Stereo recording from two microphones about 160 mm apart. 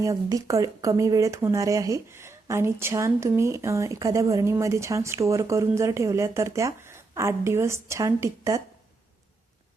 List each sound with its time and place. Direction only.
0.0 s speech: 20° right (ahead or behind)